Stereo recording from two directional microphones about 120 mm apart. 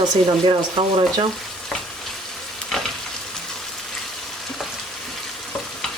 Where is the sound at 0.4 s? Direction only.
45° right (ahead or behind).